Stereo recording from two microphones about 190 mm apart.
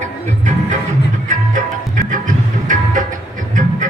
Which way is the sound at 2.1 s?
45° right (ahead or behind).